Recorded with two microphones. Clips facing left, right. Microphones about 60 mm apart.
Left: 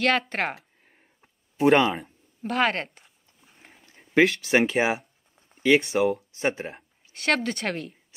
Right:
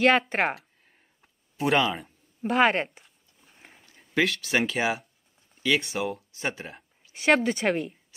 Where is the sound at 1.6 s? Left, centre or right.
Left.